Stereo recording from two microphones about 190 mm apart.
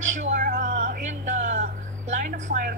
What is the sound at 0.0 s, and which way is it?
Music, 40° right (ahead or behind).